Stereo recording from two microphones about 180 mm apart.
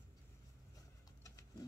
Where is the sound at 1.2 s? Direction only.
20° left (ahead or behind).